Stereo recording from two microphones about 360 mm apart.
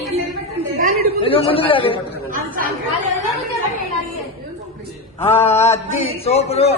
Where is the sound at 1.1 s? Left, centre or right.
Centre.